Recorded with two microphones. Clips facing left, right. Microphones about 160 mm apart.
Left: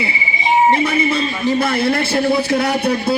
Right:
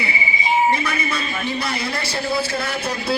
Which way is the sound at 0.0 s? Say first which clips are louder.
Left 3 dB; 25° left (ahead or behind).